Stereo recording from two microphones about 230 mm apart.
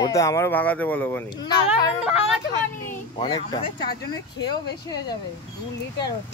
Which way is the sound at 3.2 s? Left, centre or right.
Centre.